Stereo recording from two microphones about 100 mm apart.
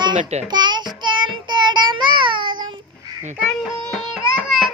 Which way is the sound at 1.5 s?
50° right (ahead or behind).